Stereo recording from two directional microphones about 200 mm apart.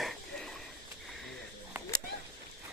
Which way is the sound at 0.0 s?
Centre (ahead or behind).